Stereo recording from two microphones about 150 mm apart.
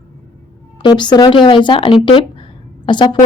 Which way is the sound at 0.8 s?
30° left (ahead or behind).